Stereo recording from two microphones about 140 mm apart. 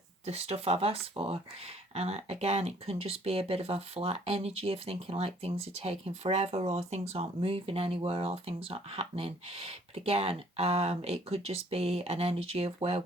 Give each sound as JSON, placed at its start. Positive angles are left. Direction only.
{"t": 0.3, "sound": "speech", "side_deg": -45}